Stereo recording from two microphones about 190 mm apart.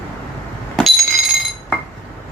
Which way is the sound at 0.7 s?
Centre (ahead or behind).